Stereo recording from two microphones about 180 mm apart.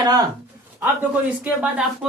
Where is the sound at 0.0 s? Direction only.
20° right (ahead or behind).